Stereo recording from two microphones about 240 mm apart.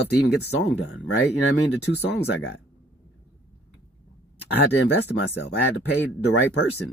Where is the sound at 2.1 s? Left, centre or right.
Left.